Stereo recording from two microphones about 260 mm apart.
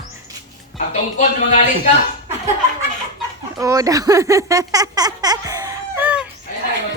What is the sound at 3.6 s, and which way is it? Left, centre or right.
Speech, centre.